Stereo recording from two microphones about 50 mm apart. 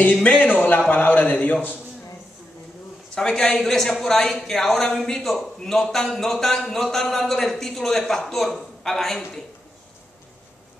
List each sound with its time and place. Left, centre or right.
0.0 s a man's voice: left
3.2 s a man's voice: centre